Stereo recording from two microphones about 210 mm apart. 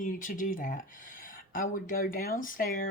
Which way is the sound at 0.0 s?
40° left (ahead or behind).